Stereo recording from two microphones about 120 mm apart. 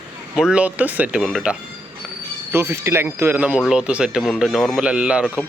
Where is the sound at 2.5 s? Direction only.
20° right (ahead or behind).